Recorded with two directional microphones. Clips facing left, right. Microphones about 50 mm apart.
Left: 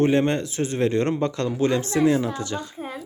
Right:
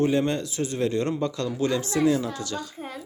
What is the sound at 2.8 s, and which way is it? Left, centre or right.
Speech, centre.